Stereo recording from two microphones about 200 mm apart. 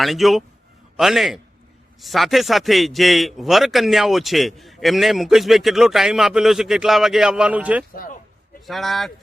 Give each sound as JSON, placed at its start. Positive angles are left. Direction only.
{"t": 0.0, "sound": "a man's voice", "side_deg": 0}
{"t": 7.9, "sound": "a sound", "side_deg": 45}
{"t": 8.6, "sound": "a man's voice", "side_deg": 0}